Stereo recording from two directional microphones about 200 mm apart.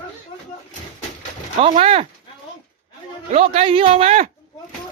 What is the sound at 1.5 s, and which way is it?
Speech, 30° right (ahead or behind).